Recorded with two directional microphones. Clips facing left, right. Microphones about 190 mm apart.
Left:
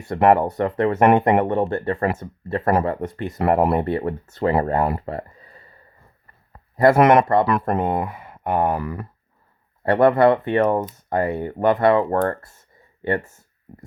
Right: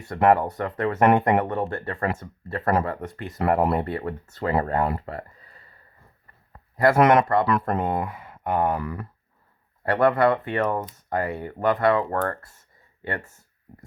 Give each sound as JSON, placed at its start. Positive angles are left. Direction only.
{"t": 0.1, "sound": "speech", "side_deg": 25}
{"t": 6.5, "sound": "a sound", "side_deg": 25}
{"t": 7.3, "sound": "speech", "side_deg": 25}